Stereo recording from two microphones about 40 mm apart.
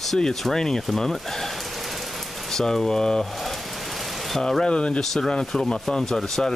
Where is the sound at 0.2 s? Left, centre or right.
Centre.